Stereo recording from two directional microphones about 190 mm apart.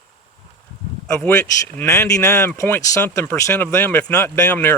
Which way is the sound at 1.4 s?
15° left (ahead or behind).